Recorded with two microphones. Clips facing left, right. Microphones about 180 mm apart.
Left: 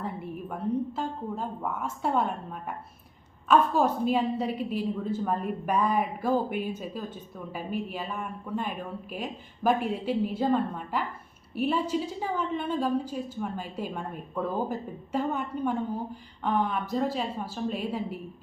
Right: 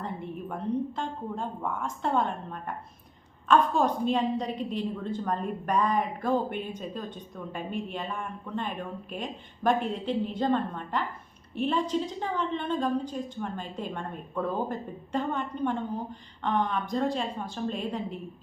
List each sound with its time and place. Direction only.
0.0 s a woman's voice: 5° left (ahead or behind)